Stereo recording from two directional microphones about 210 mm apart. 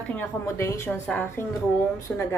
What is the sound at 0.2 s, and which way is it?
A woman's voice, 10° left (ahead or behind).